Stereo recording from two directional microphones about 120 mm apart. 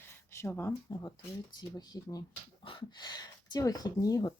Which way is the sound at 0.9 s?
30° left (ahead or behind).